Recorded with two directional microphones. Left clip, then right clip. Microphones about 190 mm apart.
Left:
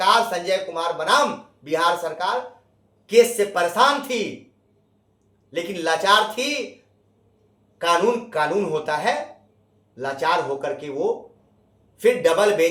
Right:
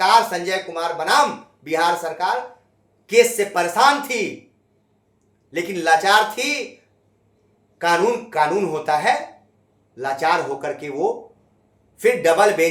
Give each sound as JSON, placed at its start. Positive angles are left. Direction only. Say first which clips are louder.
{"t": 0.0, "sound": "speech", "louder": "right 3 dB", "side_deg": -15}
{"t": 5.5, "sound": "speech", "louder": "right 5 dB", "side_deg": -15}
{"t": 7.8, "sound": "speech", "louder": "right 1 dB", "side_deg": -15}